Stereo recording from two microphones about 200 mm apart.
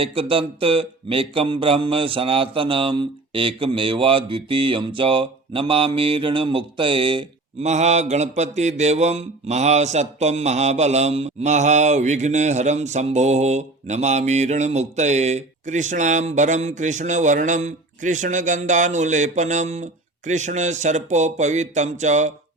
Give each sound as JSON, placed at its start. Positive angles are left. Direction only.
{"t": 0.0, "sound": "speech", "side_deg": -25}